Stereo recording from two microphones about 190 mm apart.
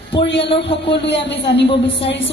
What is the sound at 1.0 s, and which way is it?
A woman's voice, 65° left (ahead or behind).